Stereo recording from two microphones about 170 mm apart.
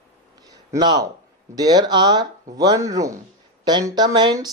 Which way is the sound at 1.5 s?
25° right (ahead or behind).